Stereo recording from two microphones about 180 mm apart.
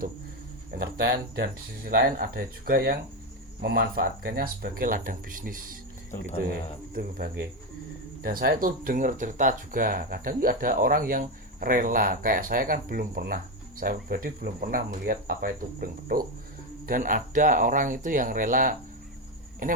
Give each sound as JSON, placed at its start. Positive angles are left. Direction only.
{"t": 0.7, "sound": "speech", "side_deg": -60}